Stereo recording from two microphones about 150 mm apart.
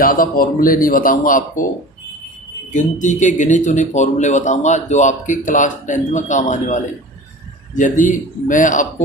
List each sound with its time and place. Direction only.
0.0 s speech: 70° left (ahead or behind)
2.7 s a man's voice: 55° left (ahead or behind)